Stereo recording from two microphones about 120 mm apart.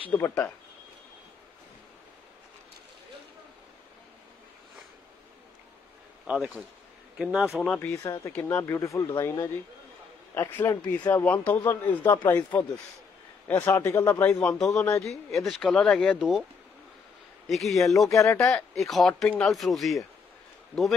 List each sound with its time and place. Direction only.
0.1 s speech: 20° left (ahead or behind)
6.2 s speech: 10° right (ahead or behind); by 7.9 s 5° left (ahead or behind)
7.9 s speech: 30° left (ahead or behind)
8.3 s speech: 15° left (ahead or behind)
8.7 s speech: 25° left (ahead or behind)
10.5 s speech: 20° left (ahead or behind)
14.4 s speech: 5° left (ahead or behind)
16.2 s speech: 5° right (ahead or behind)
17.5 s speech: centre (ahead or behind)
18.1 s speech: 25° left (ahead or behind)
18.5 s speech: centre (ahead or behind)